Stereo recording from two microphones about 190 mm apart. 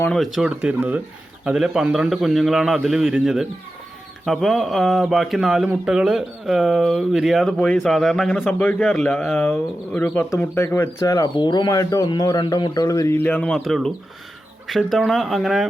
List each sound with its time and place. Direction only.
0.0 s speech: centre (ahead or behind)